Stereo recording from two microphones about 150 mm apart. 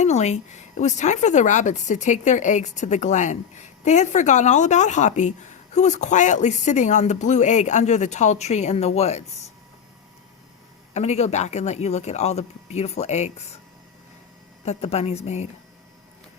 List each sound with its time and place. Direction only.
0.0 s a woman's voice: 50° left (ahead or behind)
10.9 s a woman's voice: 45° left (ahead or behind)
14.6 s a woman's voice: 45° left (ahead or behind)